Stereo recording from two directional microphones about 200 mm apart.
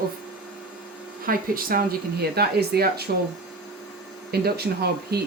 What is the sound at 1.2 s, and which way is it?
Speech, 45° right (ahead or behind).